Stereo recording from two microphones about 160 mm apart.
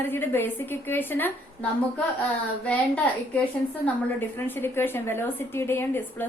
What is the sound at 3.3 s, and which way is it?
A woman's voice, 10° left (ahead or behind).